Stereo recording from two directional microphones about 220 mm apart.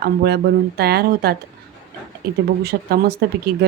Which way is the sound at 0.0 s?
45° right (ahead or behind).